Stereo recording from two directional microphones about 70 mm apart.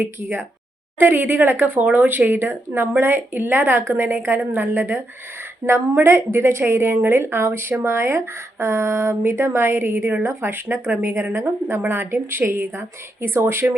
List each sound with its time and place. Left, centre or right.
0.0 s a woman's voice: right